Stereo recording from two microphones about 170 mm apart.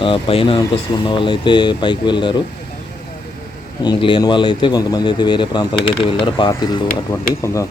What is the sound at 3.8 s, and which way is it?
Speech, 30° left (ahead or behind).